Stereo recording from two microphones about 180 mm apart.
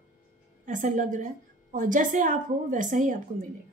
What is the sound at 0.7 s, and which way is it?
Speech, 45° right (ahead or behind).